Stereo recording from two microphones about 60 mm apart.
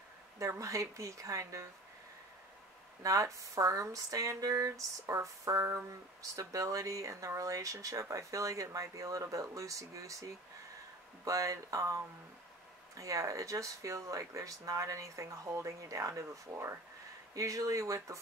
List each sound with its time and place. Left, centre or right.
0.4 s speech: right
3.0 s speech: right